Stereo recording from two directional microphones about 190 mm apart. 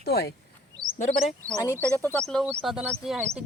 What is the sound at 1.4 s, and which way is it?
Speech, 15° right (ahead or behind).